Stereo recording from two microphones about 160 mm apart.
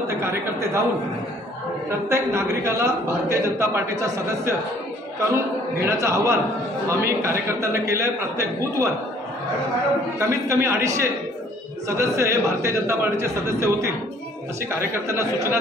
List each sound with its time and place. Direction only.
0.2 s a man's voice: 15° right (ahead or behind)
2.0 s a man's voice: 15° right (ahead or behind)
10.1 s a man's voice: 15° right (ahead or behind)
15.0 s a man's voice: 20° right (ahead or behind)